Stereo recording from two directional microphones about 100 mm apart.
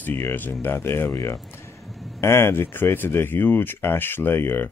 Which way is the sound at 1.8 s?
Centre (ahead or behind).